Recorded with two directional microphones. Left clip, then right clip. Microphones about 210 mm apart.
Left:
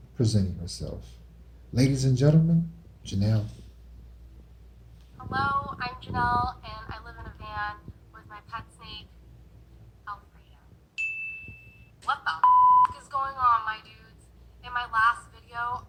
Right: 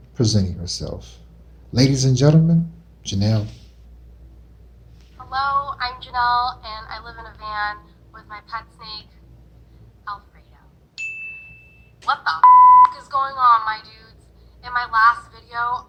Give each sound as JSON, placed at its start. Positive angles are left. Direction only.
{"t": 0.2, "sound": "speech", "side_deg": -5}
{"t": 5.3, "sound": "music", "side_deg": -15}
{"t": 12.0, "sound": "a woman's voice", "side_deg": -20}